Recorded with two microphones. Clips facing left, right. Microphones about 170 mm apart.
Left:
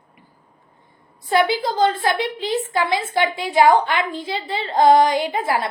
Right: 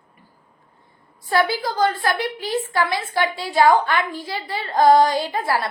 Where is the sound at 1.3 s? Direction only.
20° left (ahead or behind).